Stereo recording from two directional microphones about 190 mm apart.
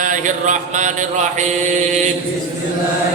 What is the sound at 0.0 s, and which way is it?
Mantra, 40° right (ahead or behind).